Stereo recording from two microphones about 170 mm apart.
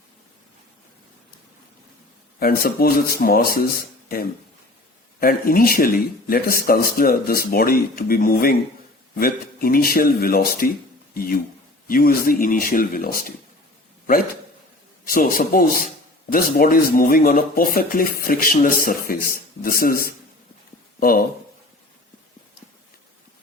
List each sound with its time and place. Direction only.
2.4 s speech: 60° left (ahead or behind)
5.2 s speech: 60° left (ahead or behind)
15.0 s speech: 55° left (ahead or behind)